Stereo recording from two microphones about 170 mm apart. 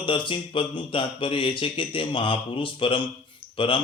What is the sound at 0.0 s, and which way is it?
Speech, 30° left (ahead or behind).